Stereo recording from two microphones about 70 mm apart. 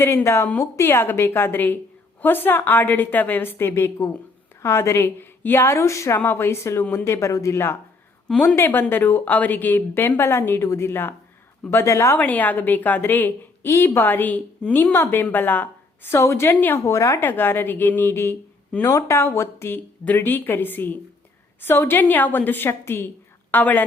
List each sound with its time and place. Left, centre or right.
0.0 s a woman's voice: left
6.1 s speech: left
12.1 s a woman's voice: left
16.2 s speech: left
16.5 s a woman's voice: left
16.8 s speech: left
17.2 s speech: left
18.8 s a woman's voice: left